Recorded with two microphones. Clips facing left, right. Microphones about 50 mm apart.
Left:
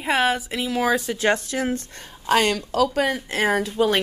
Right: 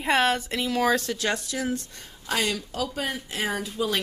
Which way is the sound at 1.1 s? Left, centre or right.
Left.